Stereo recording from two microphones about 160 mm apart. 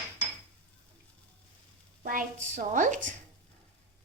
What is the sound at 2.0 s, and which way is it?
A woman's voice, 60° right (ahead or behind).